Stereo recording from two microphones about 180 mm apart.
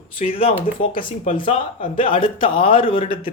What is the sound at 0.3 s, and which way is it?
Speech, 30° left (ahead or behind).